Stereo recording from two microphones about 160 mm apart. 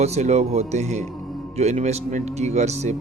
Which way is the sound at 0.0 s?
45° right (ahead or behind).